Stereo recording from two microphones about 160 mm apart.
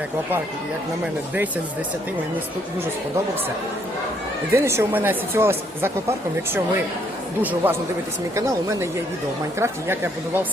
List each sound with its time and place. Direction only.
4.5 s speech: 15° right (ahead or behind)